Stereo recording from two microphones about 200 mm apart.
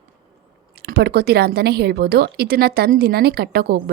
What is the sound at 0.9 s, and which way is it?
Speech, 55° right (ahead or behind).